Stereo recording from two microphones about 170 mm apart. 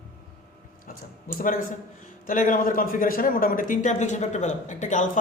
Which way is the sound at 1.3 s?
55° left (ahead or behind).